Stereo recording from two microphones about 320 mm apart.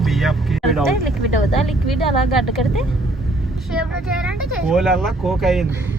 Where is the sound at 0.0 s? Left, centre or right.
Centre.